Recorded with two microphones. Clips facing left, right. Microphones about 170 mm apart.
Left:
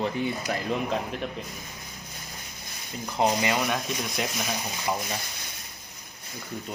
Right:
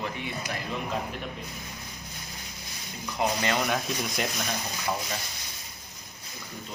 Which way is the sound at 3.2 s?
25° left (ahead or behind).